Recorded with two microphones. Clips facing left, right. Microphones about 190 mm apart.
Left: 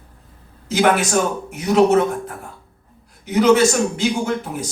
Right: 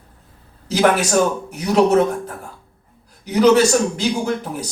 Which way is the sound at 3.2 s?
35° right (ahead or behind).